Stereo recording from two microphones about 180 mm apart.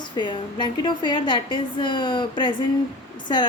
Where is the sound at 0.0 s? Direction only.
25° left (ahead or behind).